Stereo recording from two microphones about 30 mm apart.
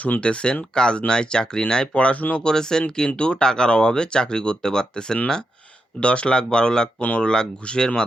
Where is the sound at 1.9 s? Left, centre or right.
Left.